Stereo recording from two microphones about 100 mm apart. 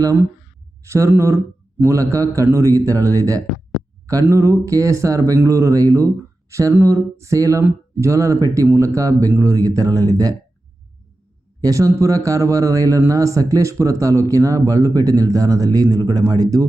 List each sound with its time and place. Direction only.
0.9 s speech: 30° right (ahead or behind)
11.6 s speech: 30° right (ahead or behind)